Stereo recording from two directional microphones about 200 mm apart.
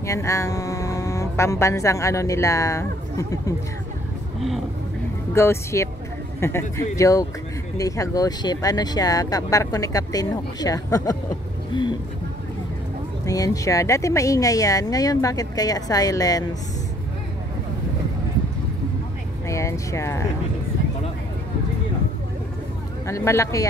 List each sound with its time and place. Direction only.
0.0 s speech: 15° left (ahead or behind)
5.3 s speech: 15° left (ahead or behind)
13.2 s speech: 15° left (ahead or behind)
19.4 s speech: 15° left (ahead or behind)
23.0 s speech: 15° left (ahead or behind)